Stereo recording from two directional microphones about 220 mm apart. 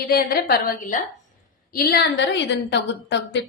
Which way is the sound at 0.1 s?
45° left (ahead or behind).